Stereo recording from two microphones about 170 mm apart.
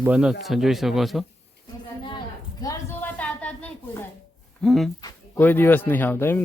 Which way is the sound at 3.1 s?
10° left (ahead or behind).